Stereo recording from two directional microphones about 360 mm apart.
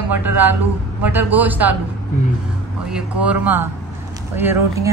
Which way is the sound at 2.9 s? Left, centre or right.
Centre.